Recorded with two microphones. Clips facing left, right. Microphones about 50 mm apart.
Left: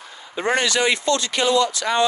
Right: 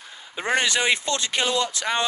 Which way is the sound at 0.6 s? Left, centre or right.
Centre.